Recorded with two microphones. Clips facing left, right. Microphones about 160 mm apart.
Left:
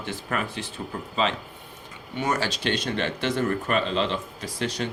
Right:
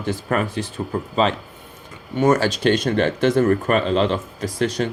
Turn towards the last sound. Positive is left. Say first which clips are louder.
# right 7 dB
turn(degrees=-45)  # may be behind; listen again after turning